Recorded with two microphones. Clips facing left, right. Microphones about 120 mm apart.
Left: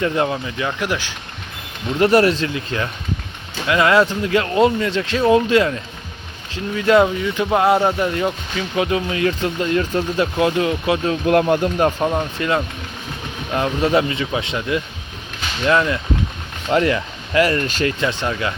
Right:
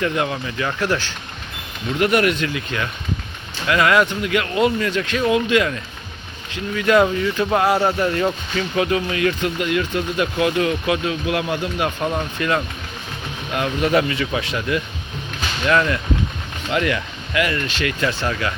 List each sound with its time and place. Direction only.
0.0 s speech: 25° left (ahead or behind)
0.8 s speech: 15° left (ahead or behind)
2.0 s speech: 35° left (ahead or behind)
12.0 s speech: 20° left (ahead or behind)
16.7 s speech: 35° left (ahead or behind)
18.0 s speech: 20° left (ahead or behind)